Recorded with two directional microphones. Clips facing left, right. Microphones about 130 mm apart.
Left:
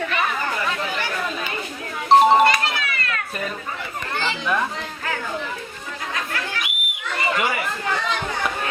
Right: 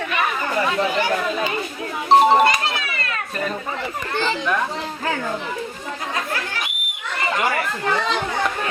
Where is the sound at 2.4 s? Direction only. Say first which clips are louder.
Even; 25° right (ahead or behind).